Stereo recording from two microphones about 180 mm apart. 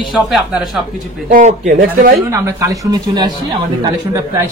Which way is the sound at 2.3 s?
15° right (ahead or behind).